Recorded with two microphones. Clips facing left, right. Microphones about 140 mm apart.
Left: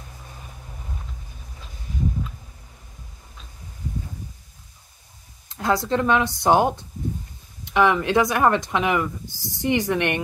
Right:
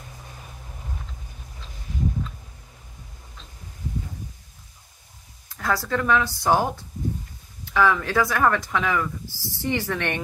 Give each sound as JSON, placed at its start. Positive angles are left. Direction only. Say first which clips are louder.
{"t": 5.5, "sound": "speech", "louder": "left 3 dB", "side_deg": 20}